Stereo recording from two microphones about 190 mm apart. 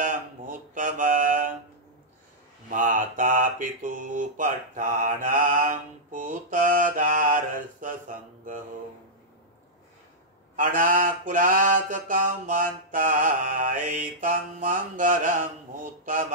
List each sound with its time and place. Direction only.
0.0 s mantra: 45° right (ahead or behind)
2.7 s mantra: 45° right (ahead or behind)
10.5 s mantra: 45° right (ahead or behind)